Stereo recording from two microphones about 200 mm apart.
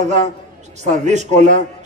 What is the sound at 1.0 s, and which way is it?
Speech, 35° right (ahead or behind).